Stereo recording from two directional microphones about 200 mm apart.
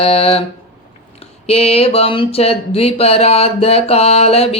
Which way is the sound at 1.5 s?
30° left (ahead or behind).